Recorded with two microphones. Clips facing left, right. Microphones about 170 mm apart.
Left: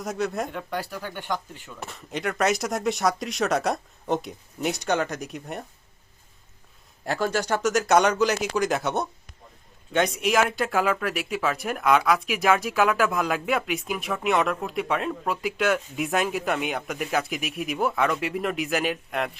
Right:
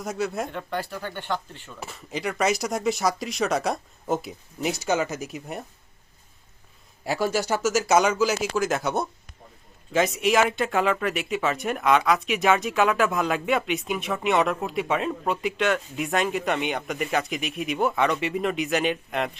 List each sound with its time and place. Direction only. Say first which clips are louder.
0.0 s speech: even; centre (ahead or behind)
0.7 s speech: right 1 dB; 10° left (ahead or behind)
1.8 s speech: even; centre (ahead or behind)
7.0 s speech: right 1 dB; 5° right (ahead or behind)